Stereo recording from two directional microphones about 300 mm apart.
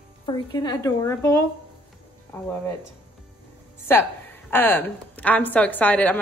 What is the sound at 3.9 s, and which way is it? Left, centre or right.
A woman's voice, centre.